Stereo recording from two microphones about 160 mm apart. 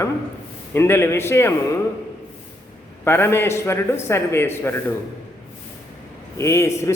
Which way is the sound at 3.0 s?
15° left (ahead or behind).